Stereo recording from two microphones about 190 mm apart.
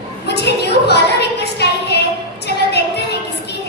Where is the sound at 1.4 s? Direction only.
60° left (ahead or behind).